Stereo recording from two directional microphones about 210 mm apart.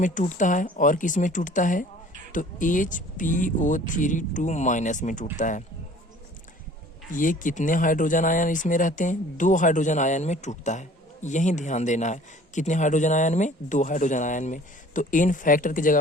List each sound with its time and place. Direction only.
0.0 s speech: 35° left (ahead or behind)
7.1 s speech: 40° left (ahead or behind)